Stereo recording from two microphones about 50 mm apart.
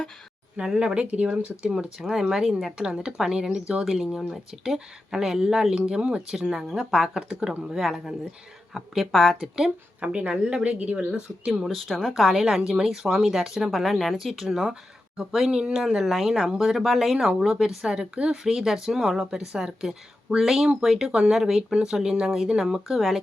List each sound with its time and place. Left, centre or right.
0.5 s speech: centre
1.0 s speech: right
2.0 s speech: centre
6.5 s speech: centre
10.0 s speech: right
10.9 s speech: centre
11.9 s speech: centre